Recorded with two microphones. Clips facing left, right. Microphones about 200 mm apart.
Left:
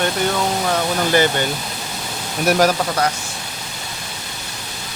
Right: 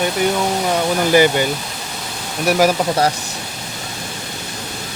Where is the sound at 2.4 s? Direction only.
5° right (ahead or behind).